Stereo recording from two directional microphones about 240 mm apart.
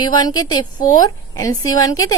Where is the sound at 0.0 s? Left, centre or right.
Centre.